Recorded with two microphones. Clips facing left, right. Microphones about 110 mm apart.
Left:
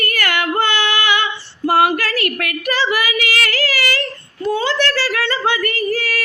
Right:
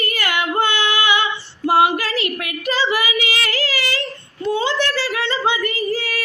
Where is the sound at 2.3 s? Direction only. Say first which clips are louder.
Left 2 dB; 15° right (ahead or behind).